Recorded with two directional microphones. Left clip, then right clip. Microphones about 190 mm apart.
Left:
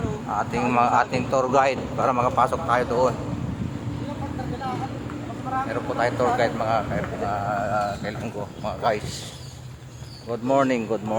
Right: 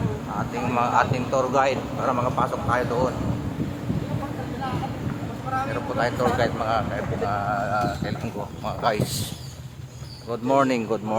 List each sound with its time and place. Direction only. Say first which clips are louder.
0.3 s speech: left 4 dB; 30° left (ahead or behind)
2.6 s speech: left 2 dB; 25° left (ahead or behind)
6.0 s speech: left 1 dB; 10° left (ahead or behind)
10.4 s speech: even; 5° left (ahead or behind)